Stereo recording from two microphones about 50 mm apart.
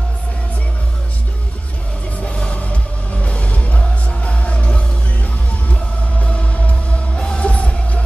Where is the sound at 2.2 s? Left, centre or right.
Left.